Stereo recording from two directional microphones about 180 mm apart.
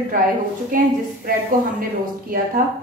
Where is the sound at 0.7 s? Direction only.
50° right (ahead or behind).